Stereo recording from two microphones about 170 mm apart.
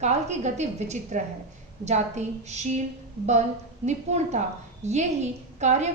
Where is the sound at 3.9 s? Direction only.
40° right (ahead or behind).